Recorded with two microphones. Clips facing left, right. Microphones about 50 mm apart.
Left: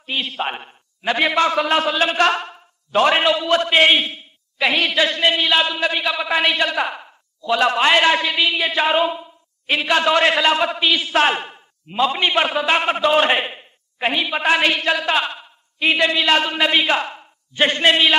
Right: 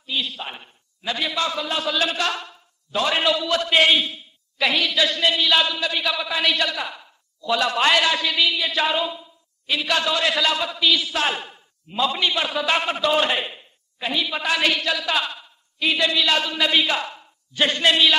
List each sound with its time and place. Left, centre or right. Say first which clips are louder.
0.0 s a man's voice: left 4 dB; left
1.9 s a man's voice: left 6 dB; left
3.2 s a woman's voice: left 4 dB; left
6.8 s a man's voice: left 8 dB; left
9.8 s a woman's voice: left 6 dB; left
12.5 s a man's voice: left 4 dB; left